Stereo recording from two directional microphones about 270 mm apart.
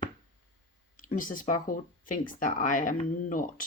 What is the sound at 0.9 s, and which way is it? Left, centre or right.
Speech, left.